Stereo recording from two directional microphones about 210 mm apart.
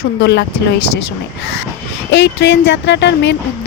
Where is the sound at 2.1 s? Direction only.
55° left (ahead or behind).